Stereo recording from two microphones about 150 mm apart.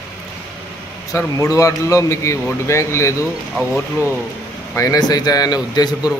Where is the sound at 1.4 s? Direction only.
20° left (ahead or behind).